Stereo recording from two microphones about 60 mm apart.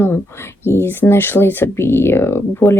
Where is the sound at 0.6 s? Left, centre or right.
Left.